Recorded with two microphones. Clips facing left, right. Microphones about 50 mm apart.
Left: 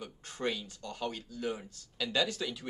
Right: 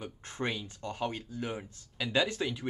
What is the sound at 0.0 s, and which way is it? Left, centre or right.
Speech, right.